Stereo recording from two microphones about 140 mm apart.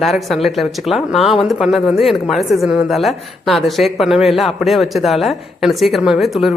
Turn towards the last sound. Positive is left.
turn(degrees=0)  # may be behind; listen again after turning